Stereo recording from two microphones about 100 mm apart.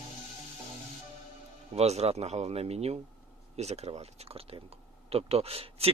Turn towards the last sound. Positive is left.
turn(degrees=-80)